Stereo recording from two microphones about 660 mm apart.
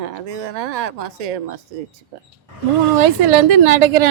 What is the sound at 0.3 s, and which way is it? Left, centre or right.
Speech, right.